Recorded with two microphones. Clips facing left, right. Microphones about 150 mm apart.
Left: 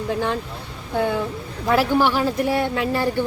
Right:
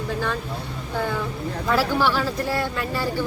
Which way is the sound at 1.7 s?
20° left (ahead or behind).